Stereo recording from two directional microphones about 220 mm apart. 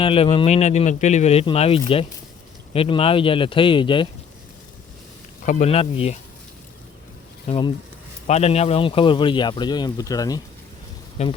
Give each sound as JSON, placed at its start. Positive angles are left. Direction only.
{"t": 0.0, "sound": "speech", "side_deg": 25}
{"t": 5.5, "sound": "speech", "side_deg": 30}
{"t": 7.4, "sound": "speech", "side_deg": 25}
{"t": 11.2, "sound": "speech", "side_deg": 30}